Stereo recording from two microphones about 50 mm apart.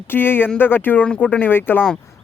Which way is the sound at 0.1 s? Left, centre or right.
Left.